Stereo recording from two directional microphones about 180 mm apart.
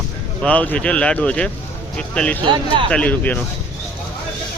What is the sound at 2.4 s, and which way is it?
Speech, 25° right (ahead or behind).